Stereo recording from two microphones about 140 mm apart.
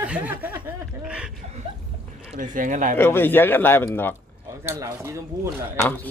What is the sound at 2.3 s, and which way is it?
Speech, 70° right (ahead or behind).